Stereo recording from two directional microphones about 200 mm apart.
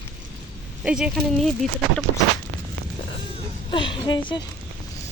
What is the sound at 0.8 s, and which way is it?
Speech, 5° right (ahead or behind).